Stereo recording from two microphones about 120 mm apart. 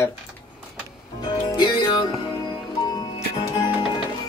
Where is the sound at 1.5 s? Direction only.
35° left (ahead or behind).